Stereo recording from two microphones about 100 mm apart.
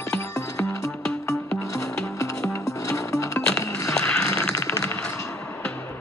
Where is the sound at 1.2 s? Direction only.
30° left (ahead or behind).